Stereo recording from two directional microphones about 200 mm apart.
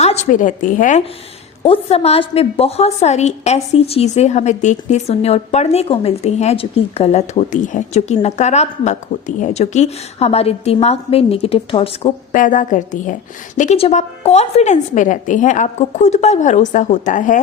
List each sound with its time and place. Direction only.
0.0 s a woman's voice: 35° left (ahead or behind)
1.6 s a woman's voice: 30° left (ahead or behind)
12.3 s a woman's voice: 40° left (ahead or behind)